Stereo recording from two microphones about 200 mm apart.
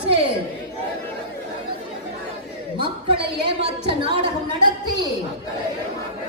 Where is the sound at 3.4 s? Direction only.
25° right (ahead or behind).